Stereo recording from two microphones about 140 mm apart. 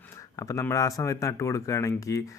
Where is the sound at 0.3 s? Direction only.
25° left (ahead or behind).